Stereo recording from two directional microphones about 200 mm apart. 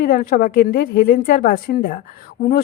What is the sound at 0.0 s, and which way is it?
A woman's voice, 45° left (ahead or behind).